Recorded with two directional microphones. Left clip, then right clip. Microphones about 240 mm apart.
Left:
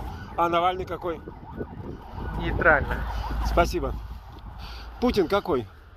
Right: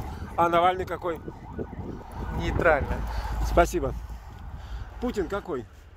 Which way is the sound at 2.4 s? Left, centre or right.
Centre.